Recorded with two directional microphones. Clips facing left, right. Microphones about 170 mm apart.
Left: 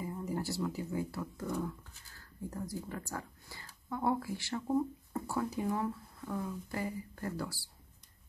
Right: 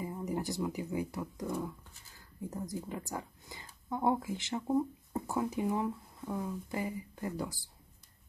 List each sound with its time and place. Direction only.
0.0 s speech: 15° right (ahead or behind)